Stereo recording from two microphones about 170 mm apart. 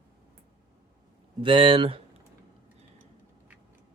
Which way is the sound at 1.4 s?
30° right (ahead or behind).